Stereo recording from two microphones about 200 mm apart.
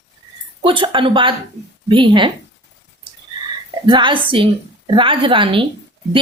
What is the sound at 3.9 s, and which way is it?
A woman's voice, 25° right (ahead or behind).